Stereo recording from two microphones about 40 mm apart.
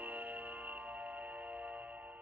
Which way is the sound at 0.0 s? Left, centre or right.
Right.